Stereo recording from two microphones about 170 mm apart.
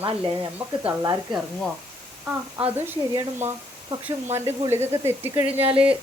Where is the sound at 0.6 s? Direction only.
5° right (ahead or behind).